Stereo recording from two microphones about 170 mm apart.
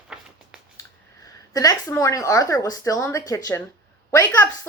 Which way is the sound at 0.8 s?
20° left (ahead or behind).